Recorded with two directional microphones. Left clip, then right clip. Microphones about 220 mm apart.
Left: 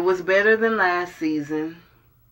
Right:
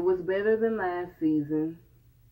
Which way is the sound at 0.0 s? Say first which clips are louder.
Left 8 dB; 20° left (ahead or behind).